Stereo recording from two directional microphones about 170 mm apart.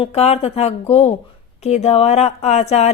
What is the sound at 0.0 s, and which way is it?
Speech, 35° left (ahead or behind).